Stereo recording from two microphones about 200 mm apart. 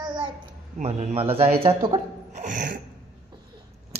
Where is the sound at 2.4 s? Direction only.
40° right (ahead or behind).